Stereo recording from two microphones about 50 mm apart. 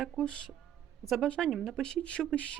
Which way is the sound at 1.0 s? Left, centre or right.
Centre.